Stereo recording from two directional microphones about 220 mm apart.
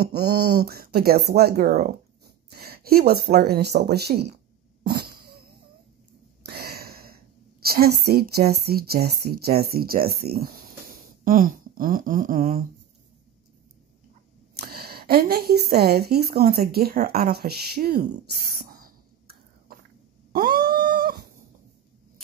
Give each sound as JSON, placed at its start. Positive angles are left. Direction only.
{"t": 0.0, "sound": "a woman's voice", "side_deg": -45}
{"t": 6.4, "sound": "a sound", "side_deg": -45}
{"t": 7.6, "sound": "a woman's voice", "side_deg": -45}
{"t": 10.4, "sound": "fart", "side_deg": -40}
{"t": 14.6, "sound": "a woman's voice", "side_deg": -45}
{"t": 18.7, "sound": "a sound", "side_deg": -40}
{"t": 20.3, "sound": "dog", "side_deg": -45}